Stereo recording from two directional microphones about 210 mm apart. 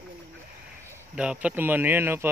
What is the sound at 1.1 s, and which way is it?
Speech, 5° right (ahead or behind).